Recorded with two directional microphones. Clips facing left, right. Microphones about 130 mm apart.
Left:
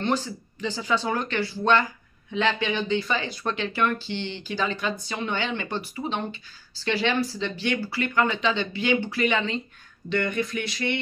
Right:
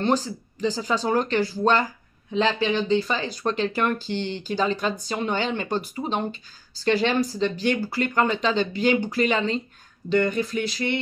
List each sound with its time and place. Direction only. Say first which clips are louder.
0.0 s speech: right 3 dB; 40° right (ahead or behind)